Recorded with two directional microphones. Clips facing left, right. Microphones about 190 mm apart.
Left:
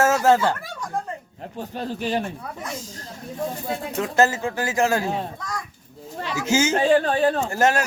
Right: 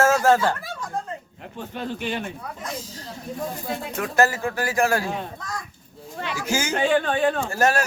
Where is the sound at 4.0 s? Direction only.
20° left (ahead or behind).